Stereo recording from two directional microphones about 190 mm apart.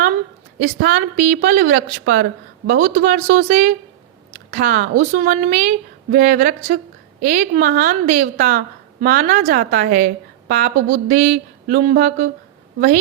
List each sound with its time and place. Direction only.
0.8 s a woman's voice: 45° right (ahead or behind)